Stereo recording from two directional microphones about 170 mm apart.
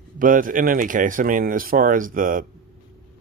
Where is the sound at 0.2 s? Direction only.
55° right (ahead or behind).